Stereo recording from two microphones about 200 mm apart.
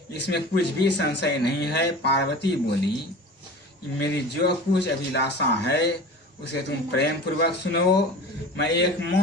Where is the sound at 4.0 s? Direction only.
55° left (ahead or behind).